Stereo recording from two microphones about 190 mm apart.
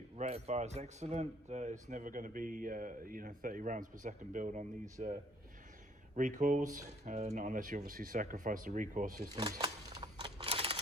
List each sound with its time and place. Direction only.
0.2 s speech: 35° right (ahead or behind)
6.1 s speech: 40° right (ahead or behind)
9.3 s a sound: 20° right (ahead or behind)